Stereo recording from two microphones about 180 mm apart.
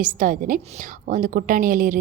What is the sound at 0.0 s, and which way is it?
A woman's voice, 50° right (ahead or behind).